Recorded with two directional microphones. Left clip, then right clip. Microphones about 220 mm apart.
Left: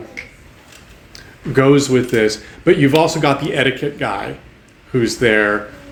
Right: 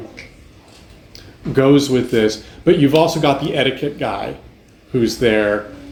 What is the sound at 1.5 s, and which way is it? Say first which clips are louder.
Speech: left 1 dB; 35° left (ahead or behind).